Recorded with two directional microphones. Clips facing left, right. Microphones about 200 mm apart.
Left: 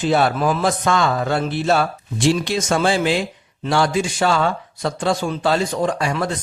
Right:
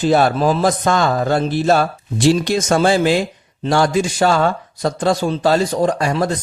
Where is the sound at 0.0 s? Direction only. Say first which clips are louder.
Right 3 dB; 40° right (ahead or behind).